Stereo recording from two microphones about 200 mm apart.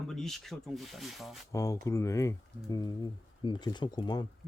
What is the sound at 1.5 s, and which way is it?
Speech, 15° left (ahead or behind).